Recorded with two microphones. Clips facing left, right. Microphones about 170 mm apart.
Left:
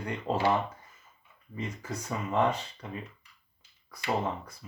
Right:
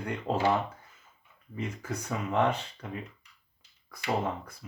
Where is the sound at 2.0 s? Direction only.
70° right (ahead or behind).